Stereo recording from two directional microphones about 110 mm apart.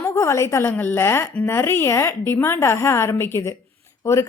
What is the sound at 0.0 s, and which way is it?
A woman's voice, 25° left (ahead or behind).